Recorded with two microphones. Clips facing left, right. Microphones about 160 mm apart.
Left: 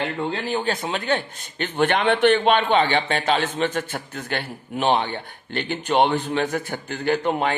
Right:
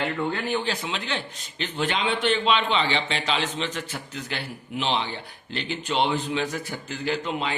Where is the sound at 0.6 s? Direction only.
45° left (ahead or behind).